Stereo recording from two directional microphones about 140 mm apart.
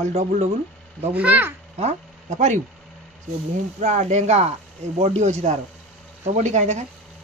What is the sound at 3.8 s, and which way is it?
Speech, 60° right (ahead or behind).